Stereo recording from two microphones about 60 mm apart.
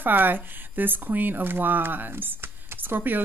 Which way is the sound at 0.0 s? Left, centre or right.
Right.